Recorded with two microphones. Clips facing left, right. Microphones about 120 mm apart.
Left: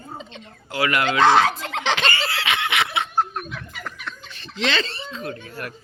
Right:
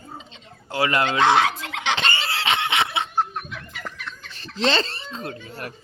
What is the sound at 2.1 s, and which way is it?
Snicker, 25° right (ahead or behind).